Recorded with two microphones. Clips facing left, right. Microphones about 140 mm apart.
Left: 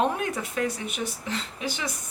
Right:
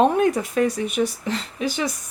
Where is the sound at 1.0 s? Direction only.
60° right (ahead or behind).